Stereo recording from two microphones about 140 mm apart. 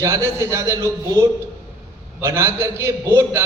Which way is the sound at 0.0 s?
20° right (ahead or behind).